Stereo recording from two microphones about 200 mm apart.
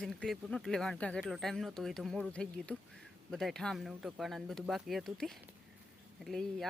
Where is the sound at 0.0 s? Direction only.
Centre (ahead or behind).